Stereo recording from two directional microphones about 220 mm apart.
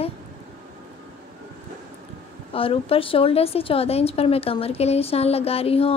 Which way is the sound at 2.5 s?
25° left (ahead or behind).